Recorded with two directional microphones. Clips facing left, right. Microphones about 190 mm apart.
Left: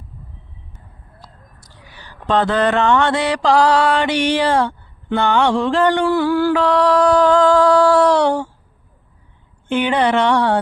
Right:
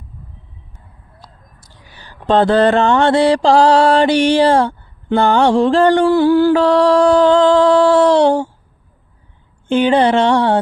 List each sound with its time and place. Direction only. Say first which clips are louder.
2.0 s mantra: right 4 dB; 30° right (ahead or behind)
9.6 s mantra: right 4 dB; 30° right (ahead or behind)